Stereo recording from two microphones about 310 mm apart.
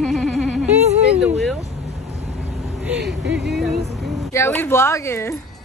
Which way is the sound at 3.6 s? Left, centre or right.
Centre.